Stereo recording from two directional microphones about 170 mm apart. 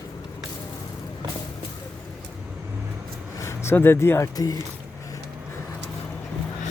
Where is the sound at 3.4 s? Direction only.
15° left (ahead or behind).